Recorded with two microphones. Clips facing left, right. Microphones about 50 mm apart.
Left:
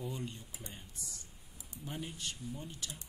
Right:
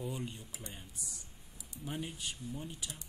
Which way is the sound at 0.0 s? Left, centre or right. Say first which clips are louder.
Right 1 dB; centre.